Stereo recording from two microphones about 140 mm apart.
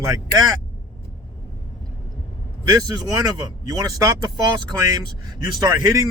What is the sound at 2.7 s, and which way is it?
A man's voice, 25° right (ahead or behind).